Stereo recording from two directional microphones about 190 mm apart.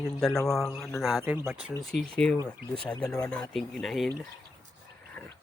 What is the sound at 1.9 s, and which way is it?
Speech, 5° left (ahead or behind).